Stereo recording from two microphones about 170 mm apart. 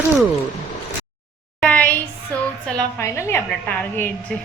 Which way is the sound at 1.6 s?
10° left (ahead or behind).